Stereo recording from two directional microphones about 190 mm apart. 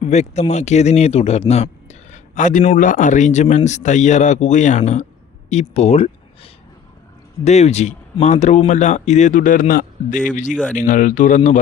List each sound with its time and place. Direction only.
0.0 s a man's voice: 35° left (ahead or behind)